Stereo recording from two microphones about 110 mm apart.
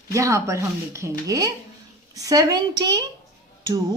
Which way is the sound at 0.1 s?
30° right (ahead or behind).